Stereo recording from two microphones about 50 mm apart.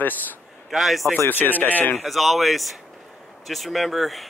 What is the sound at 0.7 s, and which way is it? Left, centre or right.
Speech, centre.